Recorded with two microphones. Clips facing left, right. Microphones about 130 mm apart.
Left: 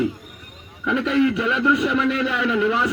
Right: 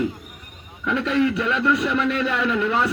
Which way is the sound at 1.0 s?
35° right (ahead or behind).